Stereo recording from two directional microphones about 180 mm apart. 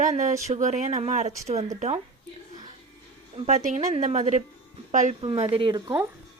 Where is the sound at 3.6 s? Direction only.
40° right (ahead or behind).